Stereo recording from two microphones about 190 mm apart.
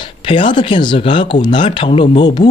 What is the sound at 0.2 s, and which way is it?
Speech, 25° left (ahead or behind).